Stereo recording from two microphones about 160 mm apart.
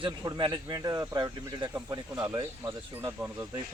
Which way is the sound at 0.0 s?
25° right (ahead or behind).